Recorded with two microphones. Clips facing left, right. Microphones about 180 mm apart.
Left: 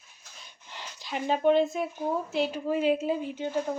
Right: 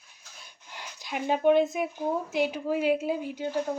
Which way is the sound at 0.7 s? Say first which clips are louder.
Even; 10° right (ahead or behind).